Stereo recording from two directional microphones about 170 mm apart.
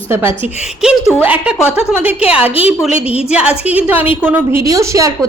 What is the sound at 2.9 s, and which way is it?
Speech, 35° left (ahead or behind).